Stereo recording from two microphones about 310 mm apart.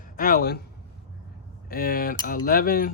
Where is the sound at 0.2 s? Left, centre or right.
Left.